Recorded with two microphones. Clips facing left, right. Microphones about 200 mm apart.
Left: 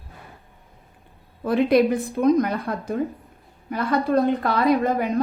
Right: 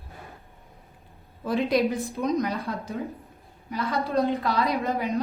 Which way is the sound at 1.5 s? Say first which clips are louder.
Left 6 dB; 55° left (ahead or behind).